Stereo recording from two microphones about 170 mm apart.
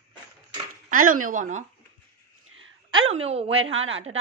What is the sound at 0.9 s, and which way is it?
Speech, 55° right (ahead or behind).